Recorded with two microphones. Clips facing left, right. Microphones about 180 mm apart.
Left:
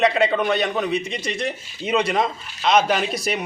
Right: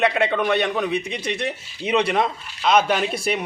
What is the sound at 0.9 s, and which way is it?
Speech, 60° right (ahead or behind).